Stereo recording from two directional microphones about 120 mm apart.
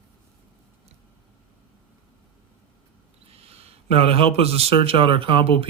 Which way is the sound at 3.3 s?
55° right (ahead or behind).